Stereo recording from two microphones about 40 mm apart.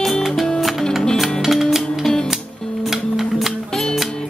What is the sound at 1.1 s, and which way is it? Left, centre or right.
Music, centre.